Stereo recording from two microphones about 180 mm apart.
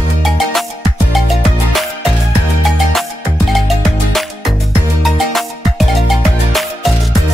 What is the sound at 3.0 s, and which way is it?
Music, centre (ahead or behind).